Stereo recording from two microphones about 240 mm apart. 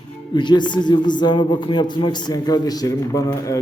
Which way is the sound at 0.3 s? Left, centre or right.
Centre.